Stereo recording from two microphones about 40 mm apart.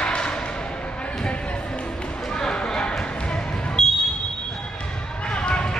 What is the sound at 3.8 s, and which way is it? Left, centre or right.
Smoke detector, centre.